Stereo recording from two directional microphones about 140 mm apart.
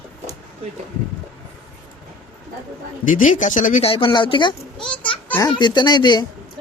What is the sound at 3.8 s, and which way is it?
Speech, 40° left (ahead or behind).